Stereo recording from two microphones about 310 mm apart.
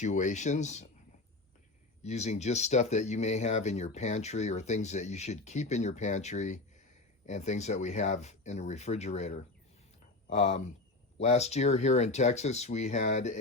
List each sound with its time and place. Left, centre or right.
0.0 s speech: left
2.0 s speech: left